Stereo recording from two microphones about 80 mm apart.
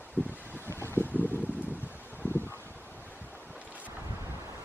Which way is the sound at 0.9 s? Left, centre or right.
Left.